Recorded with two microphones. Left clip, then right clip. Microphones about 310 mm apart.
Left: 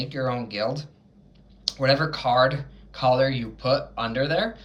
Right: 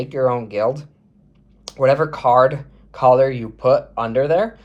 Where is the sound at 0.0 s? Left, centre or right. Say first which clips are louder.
Right 9 dB; centre.